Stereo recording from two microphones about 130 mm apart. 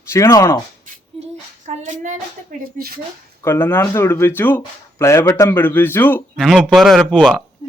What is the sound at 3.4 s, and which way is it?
Speech, 15° left (ahead or behind).